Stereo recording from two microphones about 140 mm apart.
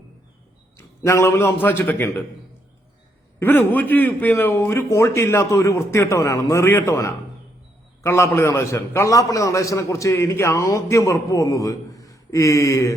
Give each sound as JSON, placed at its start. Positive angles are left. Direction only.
{"t": 1.0, "sound": "a man's voice", "side_deg": 20}
{"t": 3.4, "sound": "a man's voice", "side_deg": 15}